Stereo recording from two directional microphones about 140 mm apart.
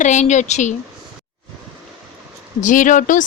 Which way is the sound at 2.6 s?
65° left (ahead or behind).